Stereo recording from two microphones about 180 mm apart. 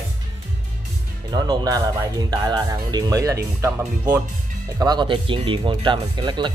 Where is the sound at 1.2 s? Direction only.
25° right (ahead or behind).